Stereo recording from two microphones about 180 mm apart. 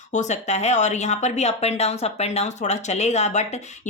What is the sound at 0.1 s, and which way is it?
Speech, 40° left (ahead or behind).